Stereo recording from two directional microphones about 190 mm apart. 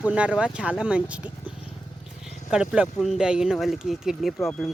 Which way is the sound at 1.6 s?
30° left (ahead or behind).